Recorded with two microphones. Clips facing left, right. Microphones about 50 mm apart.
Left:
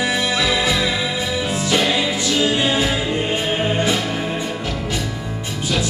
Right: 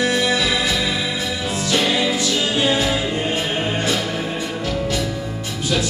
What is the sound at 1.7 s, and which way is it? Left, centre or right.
Music, centre.